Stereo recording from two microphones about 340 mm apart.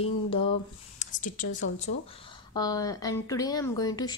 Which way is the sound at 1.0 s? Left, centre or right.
Left.